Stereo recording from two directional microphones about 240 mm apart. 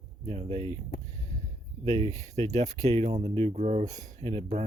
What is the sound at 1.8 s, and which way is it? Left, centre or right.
Speech, right.